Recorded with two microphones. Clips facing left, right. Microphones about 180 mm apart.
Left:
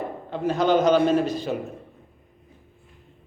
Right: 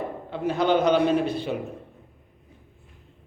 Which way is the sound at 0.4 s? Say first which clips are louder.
Left 2 dB; 45° left (ahead or behind).